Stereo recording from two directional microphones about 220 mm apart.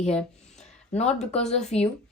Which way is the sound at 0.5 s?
30° left (ahead or behind).